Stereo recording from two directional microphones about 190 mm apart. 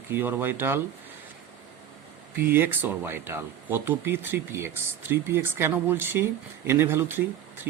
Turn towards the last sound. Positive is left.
turn(degrees=-10)  # may be behind; listen again after turning